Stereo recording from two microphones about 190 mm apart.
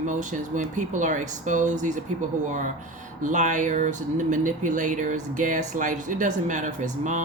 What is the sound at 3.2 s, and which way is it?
Speech, 40° right (ahead or behind).